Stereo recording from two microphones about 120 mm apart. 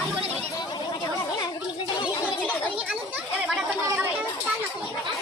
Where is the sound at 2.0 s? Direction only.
10° right (ahead or behind).